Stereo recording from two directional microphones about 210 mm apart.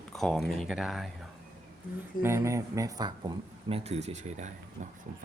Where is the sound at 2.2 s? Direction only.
10° right (ahead or behind); by 4.5 s 30° right (ahead or behind).